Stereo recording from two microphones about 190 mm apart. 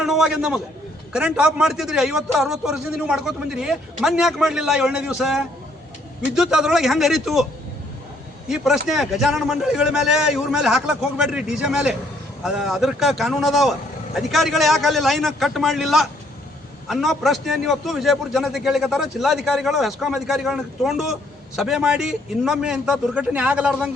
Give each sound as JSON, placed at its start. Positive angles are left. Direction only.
{"t": 0.0, "sound": "a man's voice", "side_deg": 0}
{"t": 8.4, "sound": "a man's voice", "side_deg": 0}